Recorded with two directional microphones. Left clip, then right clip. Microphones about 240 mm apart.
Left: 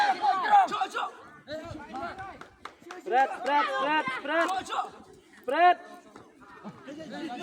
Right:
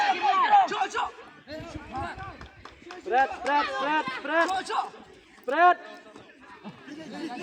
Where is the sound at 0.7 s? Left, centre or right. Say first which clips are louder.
Right 2 dB; left.